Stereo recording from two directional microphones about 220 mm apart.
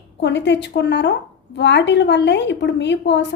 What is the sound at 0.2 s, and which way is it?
A woman's voice, 50° left (ahead or behind).